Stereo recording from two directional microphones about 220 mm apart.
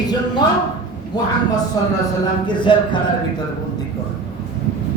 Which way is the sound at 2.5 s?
20° left (ahead or behind).